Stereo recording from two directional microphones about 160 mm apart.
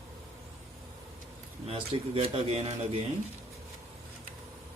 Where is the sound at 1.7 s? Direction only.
40° right (ahead or behind).